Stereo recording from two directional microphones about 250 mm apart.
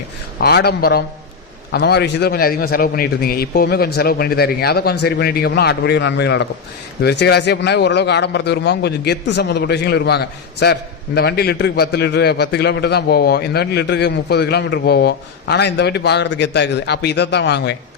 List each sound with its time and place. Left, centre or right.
0.3 s speech: left